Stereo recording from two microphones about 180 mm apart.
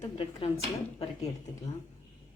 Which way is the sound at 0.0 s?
30° left (ahead or behind).